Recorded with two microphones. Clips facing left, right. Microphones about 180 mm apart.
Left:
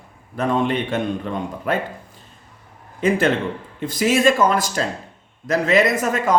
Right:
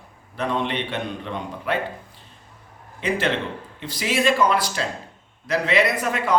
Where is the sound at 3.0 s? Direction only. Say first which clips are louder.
Left 5 dB; 45° left (ahead or behind).